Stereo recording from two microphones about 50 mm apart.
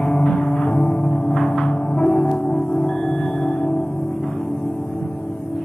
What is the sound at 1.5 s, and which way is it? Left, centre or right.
Music, centre.